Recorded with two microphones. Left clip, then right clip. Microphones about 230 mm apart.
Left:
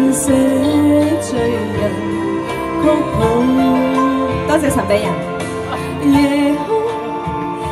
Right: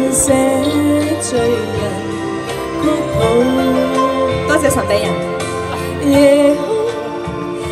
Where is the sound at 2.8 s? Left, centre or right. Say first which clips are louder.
Even; centre.